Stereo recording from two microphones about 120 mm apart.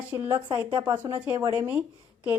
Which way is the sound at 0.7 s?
35° right (ahead or behind).